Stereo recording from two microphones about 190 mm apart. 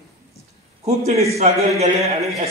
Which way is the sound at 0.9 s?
35° right (ahead or behind).